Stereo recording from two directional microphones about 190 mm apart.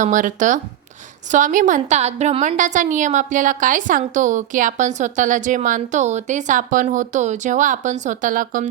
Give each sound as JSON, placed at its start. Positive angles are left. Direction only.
{"t": 0.0, "sound": "a woman's voice", "side_deg": -40}